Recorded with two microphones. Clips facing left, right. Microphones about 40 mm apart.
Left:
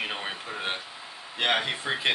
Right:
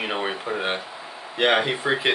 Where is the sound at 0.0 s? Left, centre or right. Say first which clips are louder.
Right 6 dB; right.